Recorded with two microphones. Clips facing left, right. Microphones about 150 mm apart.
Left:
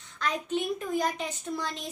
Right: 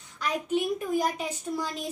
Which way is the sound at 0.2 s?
10° right (ahead or behind).